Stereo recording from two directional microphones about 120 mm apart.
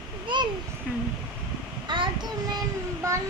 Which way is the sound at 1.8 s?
40° right (ahead or behind).